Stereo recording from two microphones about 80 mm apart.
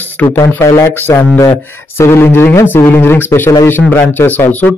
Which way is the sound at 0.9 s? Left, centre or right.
Left.